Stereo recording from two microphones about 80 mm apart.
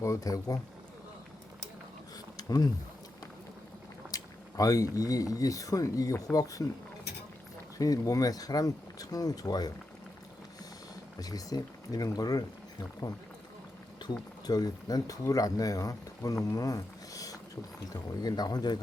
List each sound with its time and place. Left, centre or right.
0.0 s speech: left
4.1 s speech: left
7.8 s speech: left
11.2 s speech: left
14.0 s speech: left